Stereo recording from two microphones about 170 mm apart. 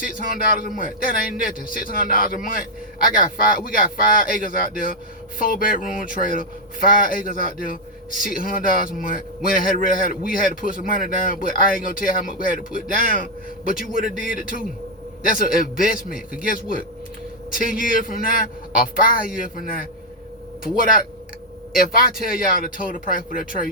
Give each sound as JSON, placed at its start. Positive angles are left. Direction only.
{"t": 0.6, "sound": "a man's voice", "side_deg": 55}
{"t": 13.8, "sound": "a man's voice", "side_deg": -50}
{"t": 14.3, "sound": "a man's voice", "side_deg": 55}
{"t": 21.8, "sound": "a man's voice", "side_deg": 55}